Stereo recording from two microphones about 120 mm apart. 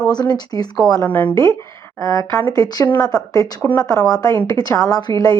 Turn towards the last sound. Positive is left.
turn(degrees=30)  # may be behind; listen again after turning